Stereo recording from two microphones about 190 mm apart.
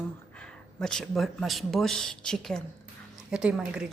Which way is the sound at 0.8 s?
5° left (ahead or behind).